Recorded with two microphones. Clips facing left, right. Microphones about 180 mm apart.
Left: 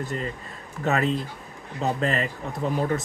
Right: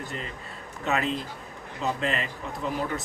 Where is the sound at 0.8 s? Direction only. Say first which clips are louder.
Left 4 dB; 40° left (ahead or behind).